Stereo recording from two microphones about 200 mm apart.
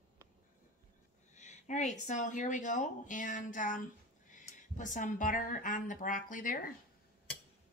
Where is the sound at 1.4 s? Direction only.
35° left (ahead or behind).